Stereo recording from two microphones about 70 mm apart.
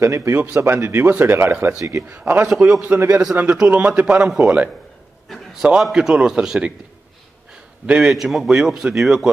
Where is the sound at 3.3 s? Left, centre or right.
Right.